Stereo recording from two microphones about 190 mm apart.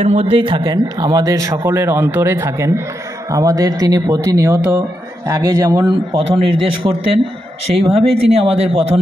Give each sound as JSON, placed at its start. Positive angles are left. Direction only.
{"t": 0.0, "sound": "a man's voice", "side_deg": -30}